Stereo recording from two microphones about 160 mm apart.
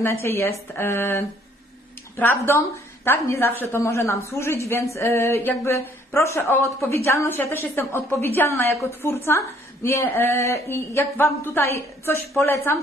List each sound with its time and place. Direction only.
0.0 s a woman's voice: 15° left (ahead or behind)